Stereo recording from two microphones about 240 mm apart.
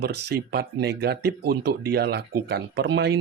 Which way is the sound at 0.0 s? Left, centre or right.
Right.